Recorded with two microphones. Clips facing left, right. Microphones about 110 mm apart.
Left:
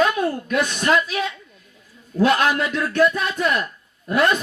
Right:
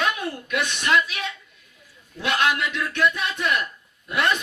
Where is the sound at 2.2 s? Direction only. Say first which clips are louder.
Left 5 dB; 40° left (ahead or behind).